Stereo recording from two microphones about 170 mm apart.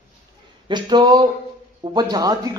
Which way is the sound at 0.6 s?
25° right (ahead or behind).